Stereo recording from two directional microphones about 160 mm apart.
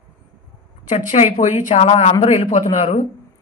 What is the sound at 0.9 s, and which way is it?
A woman's voice, 45° left (ahead or behind).